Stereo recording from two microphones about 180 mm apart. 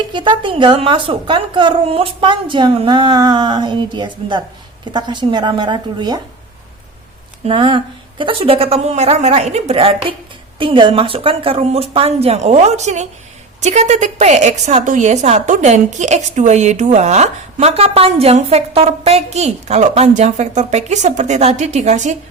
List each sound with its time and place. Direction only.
0.1 s a woman's voice: 25° right (ahead or behind)
7.4 s a woman's voice: 30° right (ahead or behind)